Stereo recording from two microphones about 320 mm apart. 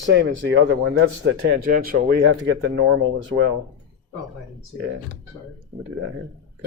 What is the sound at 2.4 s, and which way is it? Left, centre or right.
Speech, right.